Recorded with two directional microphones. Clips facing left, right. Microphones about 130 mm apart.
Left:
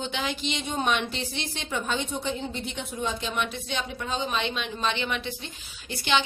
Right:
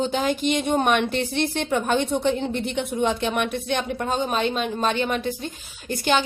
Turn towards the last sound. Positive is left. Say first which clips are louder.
# right 4 dB
turn(degrees=-45)  # may be behind; listen again after turning